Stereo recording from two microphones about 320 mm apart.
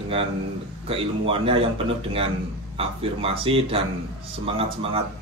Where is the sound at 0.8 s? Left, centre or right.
Centre.